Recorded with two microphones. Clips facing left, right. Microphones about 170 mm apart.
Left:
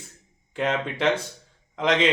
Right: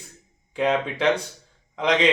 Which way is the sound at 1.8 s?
Centre (ahead or behind).